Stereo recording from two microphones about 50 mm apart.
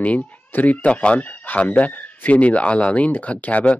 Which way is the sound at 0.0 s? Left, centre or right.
Left.